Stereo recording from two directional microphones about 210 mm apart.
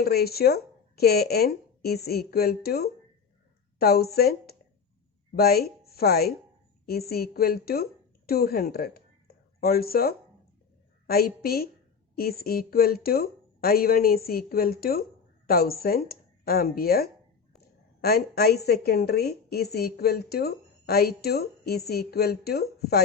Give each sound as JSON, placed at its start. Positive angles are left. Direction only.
{"t": 0.0, "sound": "a woman's voice", "side_deg": 50}